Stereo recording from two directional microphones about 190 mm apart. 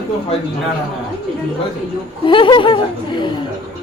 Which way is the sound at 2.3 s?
25° left (ahead or behind).